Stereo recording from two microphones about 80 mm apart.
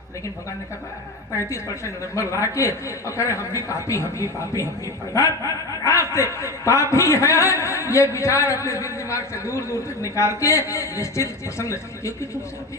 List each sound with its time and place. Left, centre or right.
1.5 s a man's voice: left